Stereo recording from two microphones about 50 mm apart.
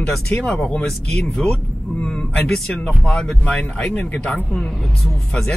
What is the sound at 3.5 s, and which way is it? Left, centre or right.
Speech, left.